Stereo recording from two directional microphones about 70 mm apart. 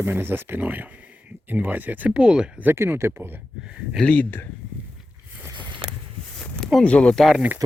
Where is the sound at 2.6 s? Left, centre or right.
Right.